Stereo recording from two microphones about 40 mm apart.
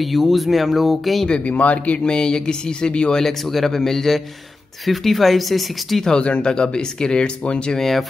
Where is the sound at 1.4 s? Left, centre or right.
Left.